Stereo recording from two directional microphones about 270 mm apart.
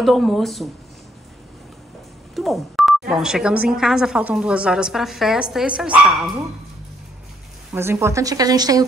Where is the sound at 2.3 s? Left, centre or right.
Centre.